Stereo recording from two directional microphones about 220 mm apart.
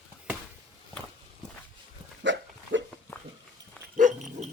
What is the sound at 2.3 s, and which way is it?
Dog, 55° right (ahead or behind).